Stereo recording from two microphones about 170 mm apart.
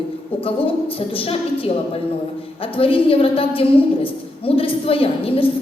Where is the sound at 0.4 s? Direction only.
35° left (ahead or behind).